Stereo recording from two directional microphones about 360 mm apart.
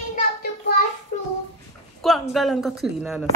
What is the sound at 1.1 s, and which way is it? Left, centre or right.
Child singing, centre.